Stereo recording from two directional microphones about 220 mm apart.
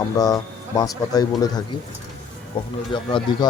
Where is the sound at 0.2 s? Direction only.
15° left (ahead or behind).